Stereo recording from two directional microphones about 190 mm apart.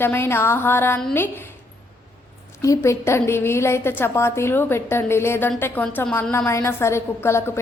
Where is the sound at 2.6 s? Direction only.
15° left (ahead or behind).